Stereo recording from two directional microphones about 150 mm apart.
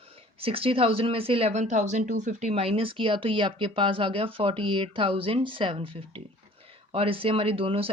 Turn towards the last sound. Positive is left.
turn(degrees=-40)  # may be behind; listen again after turning